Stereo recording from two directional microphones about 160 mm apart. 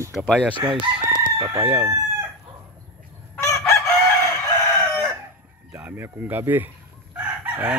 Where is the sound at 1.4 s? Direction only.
15° right (ahead or behind).